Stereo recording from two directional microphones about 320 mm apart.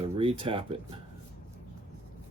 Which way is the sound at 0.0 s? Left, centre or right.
Centre.